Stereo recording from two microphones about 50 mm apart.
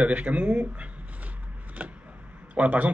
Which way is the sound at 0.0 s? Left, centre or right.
Right.